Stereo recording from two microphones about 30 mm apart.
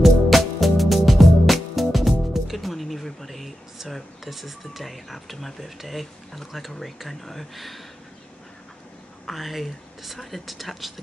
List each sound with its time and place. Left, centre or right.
0.0 s music: centre
3.9 s speech: centre
9.2 s speech: centre